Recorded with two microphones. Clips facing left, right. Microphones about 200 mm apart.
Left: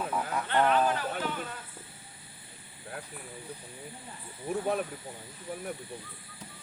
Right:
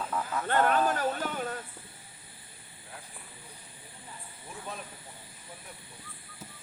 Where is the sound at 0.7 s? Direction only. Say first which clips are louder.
Even; 45° right (ahead or behind).